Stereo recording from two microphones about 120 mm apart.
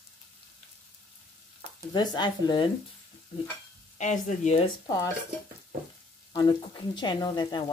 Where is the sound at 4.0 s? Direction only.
90° left.